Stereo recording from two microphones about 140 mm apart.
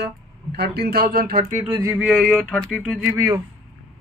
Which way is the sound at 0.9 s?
90° right.